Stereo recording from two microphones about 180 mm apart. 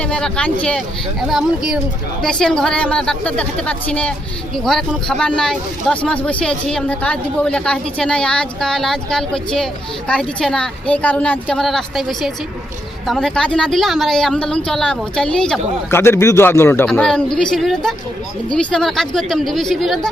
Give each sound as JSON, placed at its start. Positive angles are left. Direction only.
{"t": 0.0, "sound": "speech", "side_deg": 5}